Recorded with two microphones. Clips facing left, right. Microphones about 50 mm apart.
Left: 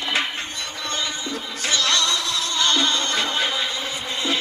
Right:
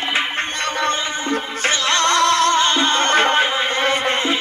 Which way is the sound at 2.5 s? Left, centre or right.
Right.